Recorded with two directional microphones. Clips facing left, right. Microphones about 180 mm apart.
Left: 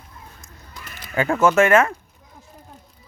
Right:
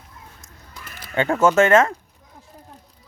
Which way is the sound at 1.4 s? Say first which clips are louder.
Right 1 dB; 25° right (ahead or behind).